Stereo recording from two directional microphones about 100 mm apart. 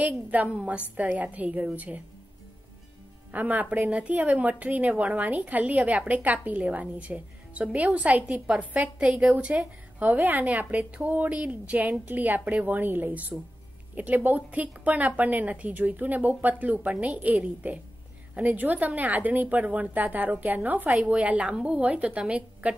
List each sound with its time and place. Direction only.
0.0 s a woman's voice: 15° right (ahead or behind)
3.3 s a woman's voice: 15° right (ahead or behind)